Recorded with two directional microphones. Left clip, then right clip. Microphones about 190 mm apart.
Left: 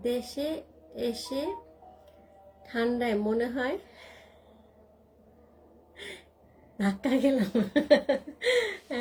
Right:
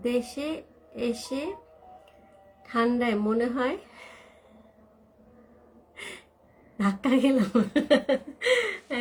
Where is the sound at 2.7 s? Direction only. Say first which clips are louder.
Right 3 dB; 20° right (ahead or behind).